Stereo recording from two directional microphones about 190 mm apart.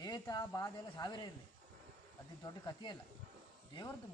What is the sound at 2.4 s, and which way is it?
Speech, 20° left (ahead or behind).